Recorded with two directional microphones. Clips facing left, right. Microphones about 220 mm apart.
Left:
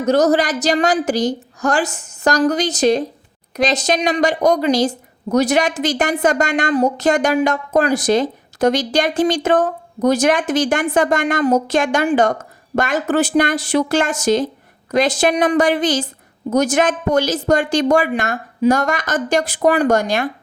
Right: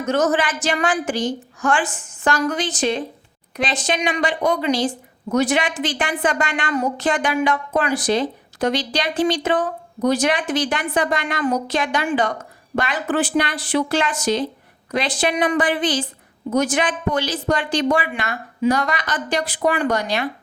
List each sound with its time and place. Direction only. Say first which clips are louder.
0.0 s a woman's voice: left 5 dB; 35° left (ahead or behind)